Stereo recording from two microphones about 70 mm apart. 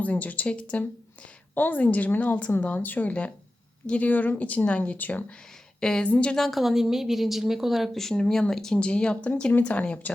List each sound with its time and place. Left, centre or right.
0.0 s speech: left
5.8 s a woman's voice: centre